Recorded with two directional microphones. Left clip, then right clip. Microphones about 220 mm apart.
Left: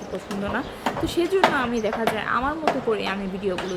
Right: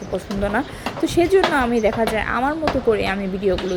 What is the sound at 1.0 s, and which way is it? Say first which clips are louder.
A woman's voice: right 5 dB; 25° right (ahead or behind).